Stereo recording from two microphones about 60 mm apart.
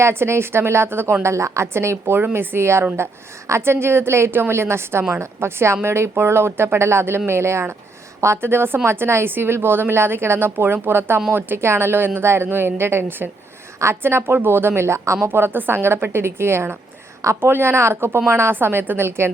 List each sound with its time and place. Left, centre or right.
0.0 s a woman's voice: right
1.2 s a woman's voice: right
13.7 s a woman's voice: right